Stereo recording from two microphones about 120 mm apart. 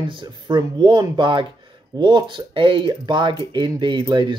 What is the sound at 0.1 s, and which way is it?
Speech, 45° right (ahead or behind).